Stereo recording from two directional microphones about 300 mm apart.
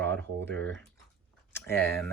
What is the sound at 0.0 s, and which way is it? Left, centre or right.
Typing, centre.